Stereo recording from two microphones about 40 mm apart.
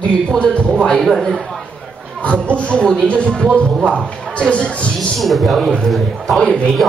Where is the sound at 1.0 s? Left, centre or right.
Centre.